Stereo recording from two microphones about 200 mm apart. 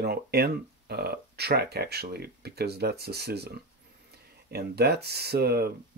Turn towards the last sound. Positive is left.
turn(degrees=-50)  # may be behind; listen again after turning